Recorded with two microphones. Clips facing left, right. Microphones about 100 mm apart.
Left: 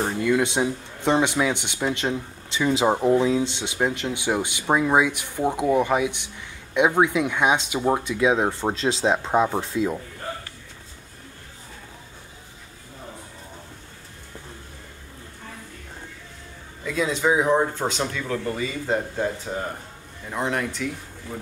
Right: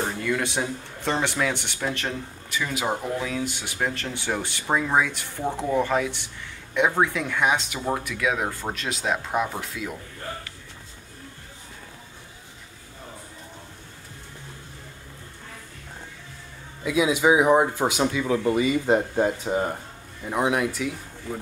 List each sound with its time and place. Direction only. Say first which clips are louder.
0.2 s speech: left 5 dB; 20° left (ahead or behind)
16.8 s speech: right 3 dB; 10° right (ahead or behind)